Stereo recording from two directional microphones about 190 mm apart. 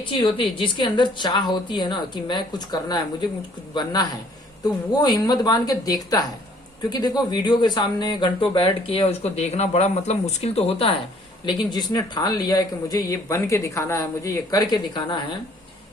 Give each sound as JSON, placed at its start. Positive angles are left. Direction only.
{"t": 0.0, "sound": "speech", "side_deg": 25}
{"t": 4.6, "sound": "speech", "side_deg": 20}